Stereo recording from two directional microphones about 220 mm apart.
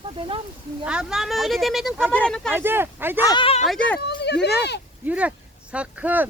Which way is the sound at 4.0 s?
50° left (ahead or behind).